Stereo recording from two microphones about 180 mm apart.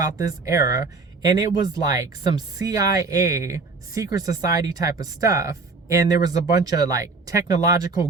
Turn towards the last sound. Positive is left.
turn(degrees=-20)  # may be behind; listen again after turning